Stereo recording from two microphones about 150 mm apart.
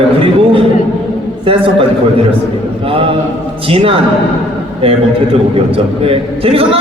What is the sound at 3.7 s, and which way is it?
Speech, 40° right (ahead or behind).